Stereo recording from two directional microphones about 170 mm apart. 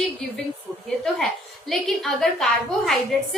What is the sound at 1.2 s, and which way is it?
A woman's voice, centre (ahead or behind).